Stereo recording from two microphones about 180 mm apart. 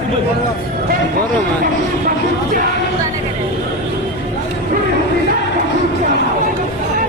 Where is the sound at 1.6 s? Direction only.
50° right (ahead or behind).